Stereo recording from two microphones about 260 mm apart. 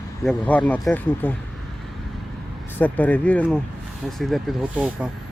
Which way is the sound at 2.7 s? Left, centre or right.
Centre.